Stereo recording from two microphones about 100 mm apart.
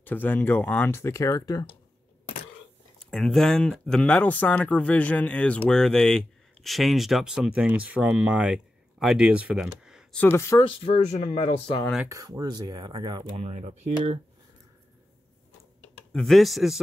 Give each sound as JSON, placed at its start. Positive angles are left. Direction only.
{"t": 0.0, "sound": "speech", "side_deg": 20}
{"t": 3.0, "sound": "speech", "side_deg": 5}
{"t": 10.1, "sound": "speech", "side_deg": 25}
{"t": 11.3, "sound": "speech", "side_deg": 80}
{"t": 12.1, "sound": "speech", "side_deg": -40}
{"t": 13.9, "sound": "speech", "side_deg": -70}
{"t": 16.1, "sound": "speech", "side_deg": 5}